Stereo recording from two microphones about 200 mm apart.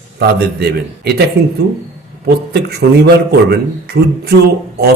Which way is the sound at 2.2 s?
55° right (ahead or behind).